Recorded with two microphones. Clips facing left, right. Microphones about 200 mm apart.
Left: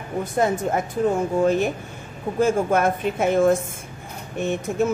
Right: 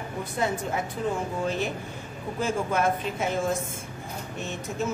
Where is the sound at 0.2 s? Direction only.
45° left (ahead or behind).